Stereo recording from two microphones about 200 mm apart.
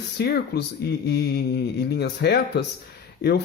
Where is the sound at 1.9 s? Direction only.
55° left (ahead or behind).